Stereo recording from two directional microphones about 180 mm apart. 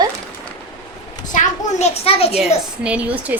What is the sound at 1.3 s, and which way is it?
A child's voice, 35° left (ahead or behind).